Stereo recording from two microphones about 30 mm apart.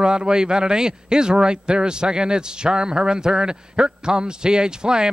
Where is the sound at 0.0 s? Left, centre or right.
Right.